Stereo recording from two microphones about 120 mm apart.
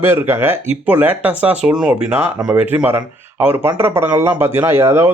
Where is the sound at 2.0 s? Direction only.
20° right (ahead or behind).